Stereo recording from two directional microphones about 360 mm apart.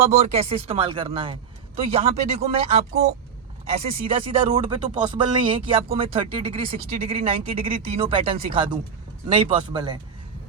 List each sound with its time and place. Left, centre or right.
0.1 s speech: centre